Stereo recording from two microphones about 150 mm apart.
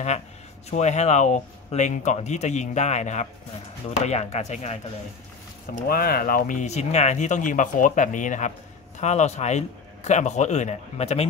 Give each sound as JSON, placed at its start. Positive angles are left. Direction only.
{"t": 0.7, "sound": "speech", "side_deg": 50}
{"t": 5.8, "sound": "speech", "side_deg": 75}